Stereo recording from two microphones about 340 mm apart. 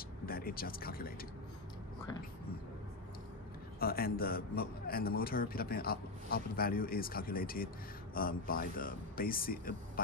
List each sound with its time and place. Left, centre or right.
0.3 s a man's voice: left
3.8 s a man's voice: left